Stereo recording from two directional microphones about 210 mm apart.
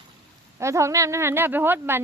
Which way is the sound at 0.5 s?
15° right (ahead or behind).